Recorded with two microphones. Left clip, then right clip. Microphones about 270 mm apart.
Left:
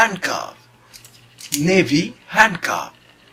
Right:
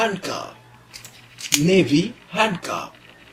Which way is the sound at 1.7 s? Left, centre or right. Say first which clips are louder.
Left 4 dB; left.